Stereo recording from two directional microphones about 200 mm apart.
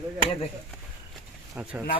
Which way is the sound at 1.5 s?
5° right (ahead or behind).